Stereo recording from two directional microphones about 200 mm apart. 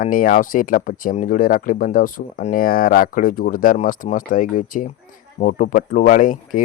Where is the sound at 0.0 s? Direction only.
45° left (ahead or behind).